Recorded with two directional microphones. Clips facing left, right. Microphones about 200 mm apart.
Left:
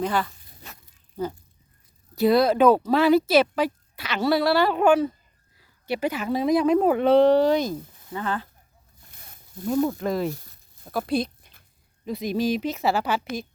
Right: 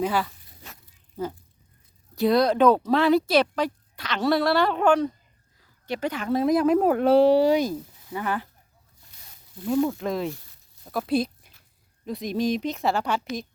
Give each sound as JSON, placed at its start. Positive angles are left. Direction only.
{"t": 0.0, "sound": "speech", "side_deg": -5}
{"t": 9.0, "sound": "a sound", "side_deg": 55}
{"t": 9.8, "sound": "speech", "side_deg": 0}